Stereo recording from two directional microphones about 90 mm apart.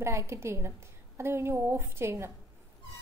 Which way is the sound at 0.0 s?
30° right (ahead or behind).